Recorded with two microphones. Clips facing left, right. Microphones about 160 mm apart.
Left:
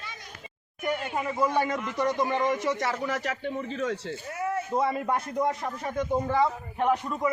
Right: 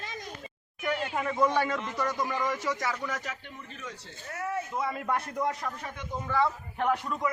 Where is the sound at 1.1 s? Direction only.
5° left (ahead or behind); by 2.9 s 25° left (ahead or behind).